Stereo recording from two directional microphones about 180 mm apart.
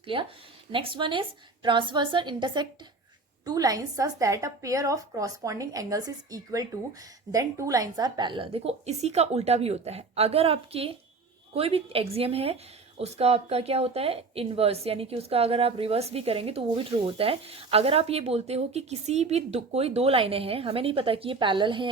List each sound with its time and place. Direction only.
0.0 s a woman's voice: 30° right (ahead or behind)